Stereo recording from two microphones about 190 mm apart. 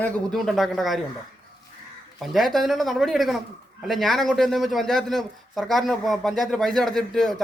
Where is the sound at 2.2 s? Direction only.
Centre (ahead or behind).